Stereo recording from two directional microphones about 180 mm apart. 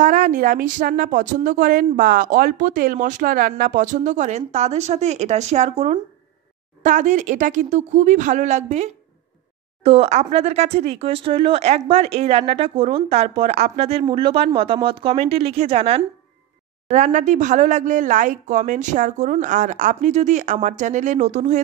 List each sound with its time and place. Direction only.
0.0 s a woman's voice: 50° right (ahead or behind)